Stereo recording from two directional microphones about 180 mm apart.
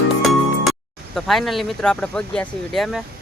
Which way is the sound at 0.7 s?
Centre (ahead or behind).